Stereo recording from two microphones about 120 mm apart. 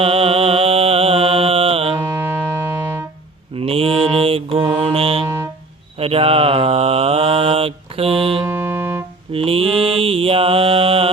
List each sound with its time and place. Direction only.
0.0 s mantra: 55° right (ahead or behind)
2.0 s music: 20° right (ahead or behind)
3.5 s mantra: 55° right (ahead or behind)
8.4 s music: 20° right (ahead or behind)
9.3 s mantra: 50° right (ahead or behind)